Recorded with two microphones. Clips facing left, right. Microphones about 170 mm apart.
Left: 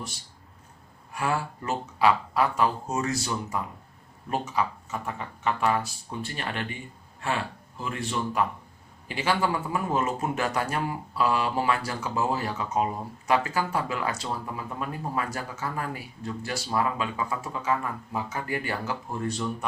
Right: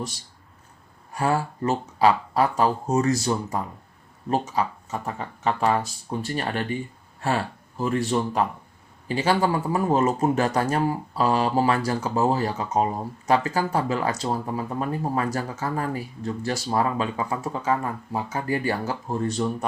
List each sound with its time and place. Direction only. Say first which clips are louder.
1.1 s speech: right 5 dB; 40° right (ahead or behind)